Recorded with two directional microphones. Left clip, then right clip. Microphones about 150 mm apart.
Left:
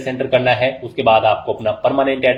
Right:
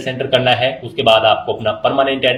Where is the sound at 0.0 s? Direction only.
40° left (ahead or behind).